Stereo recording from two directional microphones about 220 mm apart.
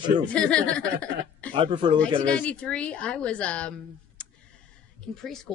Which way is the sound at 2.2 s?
5° left (ahead or behind).